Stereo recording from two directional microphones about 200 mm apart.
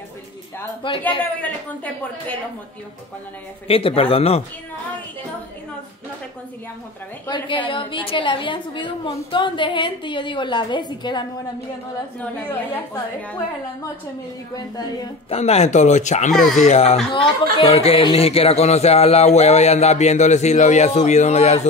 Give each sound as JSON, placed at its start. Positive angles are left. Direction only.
{"t": 0.8, "sound": "a woman's voice", "side_deg": 25}
{"t": 3.6, "sound": "a woman's voice", "side_deg": 30}
{"t": 7.2, "sound": "a woman's voice", "side_deg": 25}
{"t": 12.2, "sound": "a woman's voice", "side_deg": 10}
{"t": 14.5, "sound": "a woman's voice", "side_deg": 20}
{"t": 15.3, "sound": "speech", "side_deg": 30}